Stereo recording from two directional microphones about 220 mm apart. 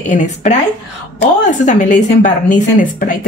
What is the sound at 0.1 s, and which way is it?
Speech, 35° left (ahead or behind).